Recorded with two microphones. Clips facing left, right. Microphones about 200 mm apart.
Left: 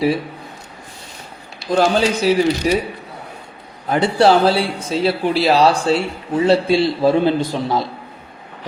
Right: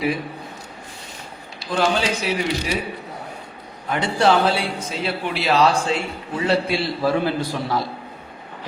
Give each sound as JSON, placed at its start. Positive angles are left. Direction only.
{"t": 1.5, "sound": "speech", "side_deg": 45}
{"t": 3.8, "sound": "speech", "side_deg": 35}